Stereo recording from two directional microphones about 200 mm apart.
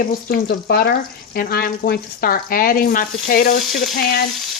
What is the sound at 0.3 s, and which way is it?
Speech, 50° left (ahead or behind).